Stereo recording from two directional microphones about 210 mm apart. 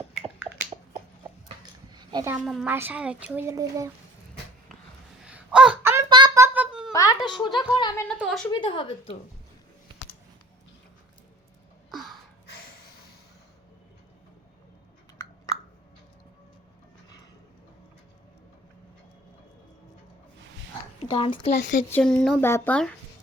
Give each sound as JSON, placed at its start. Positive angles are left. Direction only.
{"t": 0.2, "sound": "finger snapping", "side_deg": -5}
{"t": 1.9, "sound": "a sound", "side_deg": -20}
{"t": 2.4, "sound": "a child's voice", "side_deg": 0}
{"t": 5.2, "sound": "a sound", "side_deg": -5}
{"t": 6.9, "sound": "a sound", "side_deg": 15}
{"t": 7.3, "sound": "speech", "side_deg": 20}
{"t": 8.0, "sound": "a child's voice", "side_deg": 0}
{"t": 8.4, "sound": "a woman's voice", "side_deg": 25}
{"t": 11.9, "sound": "gasp", "side_deg": 0}
{"t": 21.1, "sound": "speech", "side_deg": 25}
{"t": 21.7, "sound": "speech", "side_deg": 35}
{"t": 21.9, "sound": "a child's voice", "side_deg": 5}